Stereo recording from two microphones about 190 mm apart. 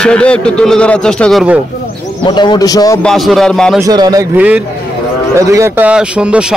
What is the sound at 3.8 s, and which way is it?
Speech, 20° right (ahead or behind).